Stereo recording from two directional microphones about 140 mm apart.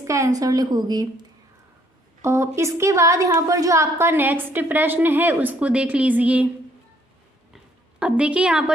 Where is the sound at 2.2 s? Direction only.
20° right (ahead or behind).